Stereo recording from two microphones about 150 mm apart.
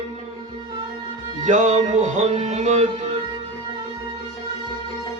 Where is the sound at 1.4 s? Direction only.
55° right (ahead or behind).